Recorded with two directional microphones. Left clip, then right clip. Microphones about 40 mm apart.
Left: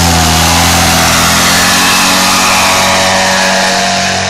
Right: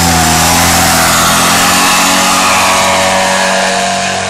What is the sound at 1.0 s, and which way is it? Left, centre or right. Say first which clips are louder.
Vehicle: even; right.